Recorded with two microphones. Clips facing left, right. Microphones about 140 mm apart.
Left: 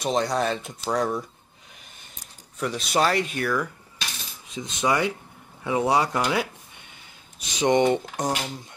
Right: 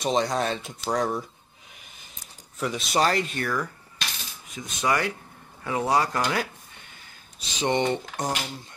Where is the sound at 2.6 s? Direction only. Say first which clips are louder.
Left 1 dB; centre (ahead or behind).